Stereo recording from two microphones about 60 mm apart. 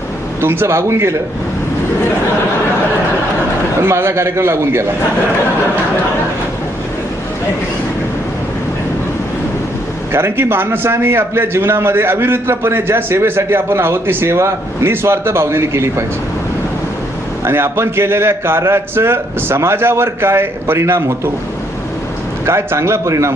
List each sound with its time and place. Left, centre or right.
0.4 s a man's voice: right
3.8 s a man's voice: right
10.1 s a man's voice: right
17.4 s a man's voice: right
22.4 s a man's voice: right